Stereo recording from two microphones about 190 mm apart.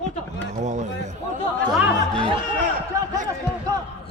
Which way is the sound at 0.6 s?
40° right (ahead or behind).